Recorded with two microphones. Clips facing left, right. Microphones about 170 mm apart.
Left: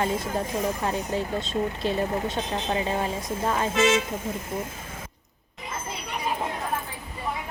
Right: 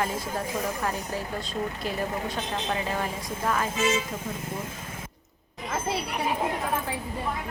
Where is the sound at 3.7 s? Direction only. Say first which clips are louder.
Left 5 dB; 80° left.